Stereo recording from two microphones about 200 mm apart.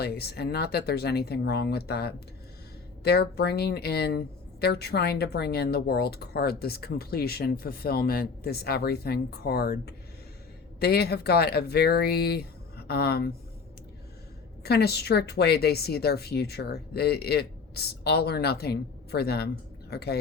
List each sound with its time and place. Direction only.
0.0 s speech: 50° left (ahead or behind)
14.6 s speech: 55° left (ahead or behind)